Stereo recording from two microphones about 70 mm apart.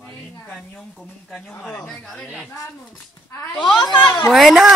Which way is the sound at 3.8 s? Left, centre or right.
Left.